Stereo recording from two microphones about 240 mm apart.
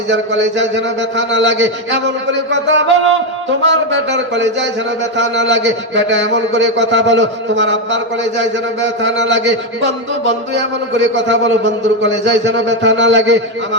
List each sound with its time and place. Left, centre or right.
0.1 s a man's voice: right